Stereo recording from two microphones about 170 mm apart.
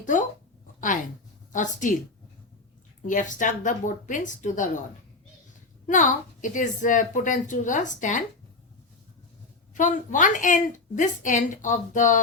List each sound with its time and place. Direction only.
0.0 s speech: 50° left (ahead or behind)
1.5 s a woman's voice: 50° left (ahead or behind)
3.1 s a woman's voice: 50° left (ahead or behind)
5.8 s a woman's voice: 50° left (ahead or behind)
9.7 s a woman's voice: 50° left (ahead or behind)